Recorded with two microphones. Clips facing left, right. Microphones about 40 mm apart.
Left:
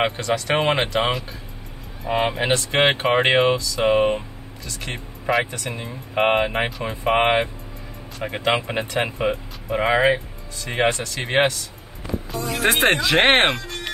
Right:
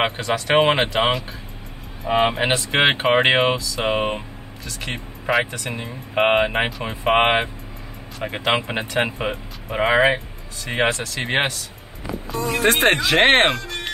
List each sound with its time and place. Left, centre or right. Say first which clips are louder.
0.0 s speech: even; centre
2.5 s speech: even; centre
12.4 s speech: right 4 dB; right
12.6 s speech: right 1 dB; centre